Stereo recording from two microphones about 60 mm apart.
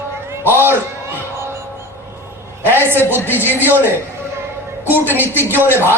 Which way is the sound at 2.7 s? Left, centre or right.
Right.